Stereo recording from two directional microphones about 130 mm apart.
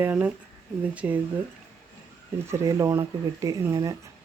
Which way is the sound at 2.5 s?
20° right (ahead or behind).